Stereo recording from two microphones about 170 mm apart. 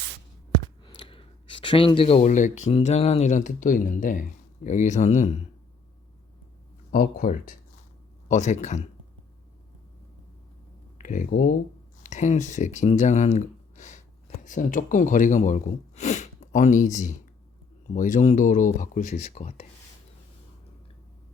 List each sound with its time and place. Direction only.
0.9 s speech: 30° left (ahead or behind)
6.9 s speech: 55° left (ahead or behind)
10.9 s speech: 50° left (ahead or behind)
12.0 s speech: 45° left (ahead or behind)